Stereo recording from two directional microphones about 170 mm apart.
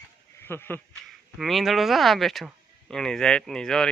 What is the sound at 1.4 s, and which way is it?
Speech, centre (ahead or behind).